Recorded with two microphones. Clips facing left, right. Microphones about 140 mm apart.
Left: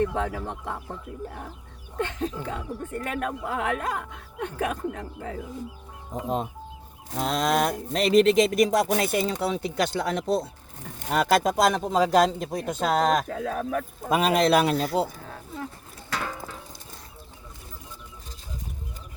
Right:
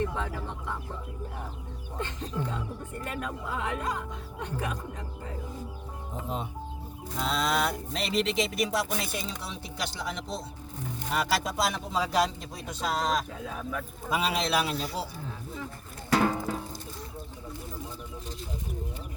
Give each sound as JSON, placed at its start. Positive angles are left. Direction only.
{"t": 0.1, "sound": "speech", "side_deg": 60}
{"t": 2.0, "sound": "speech", "side_deg": 60}
{"t": 6.2, "sound": "speech", "side_deg": 45}
{"t": 16.1, "sound": "music", "side_deg": -35}